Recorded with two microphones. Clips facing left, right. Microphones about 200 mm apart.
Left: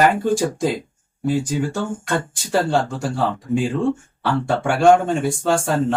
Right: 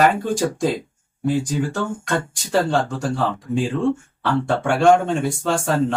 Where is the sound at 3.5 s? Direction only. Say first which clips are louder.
Left 2 dB; 40° left (ahead or behind).